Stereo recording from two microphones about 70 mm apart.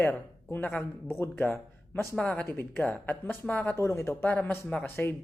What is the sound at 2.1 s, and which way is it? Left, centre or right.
Speech, centre.